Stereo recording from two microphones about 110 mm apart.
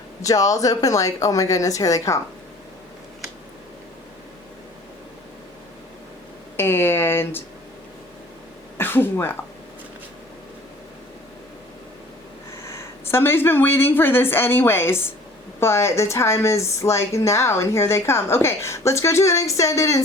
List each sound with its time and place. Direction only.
0.2 s speech: 30° left (ahead or behind)
6.6 s speech: 20° left (ahead or behind)
8.8 s speech: 20° left (ahead or behind)
12.6 s speech: 25° left (ahead or behind)